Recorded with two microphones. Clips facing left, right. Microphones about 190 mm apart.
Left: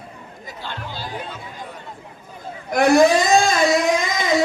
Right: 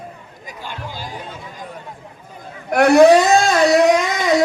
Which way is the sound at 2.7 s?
65° right (ahead or behind).